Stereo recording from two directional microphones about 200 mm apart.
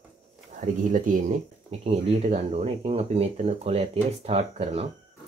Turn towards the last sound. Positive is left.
turn(degrees=-30)  # may be behind; listen again after turning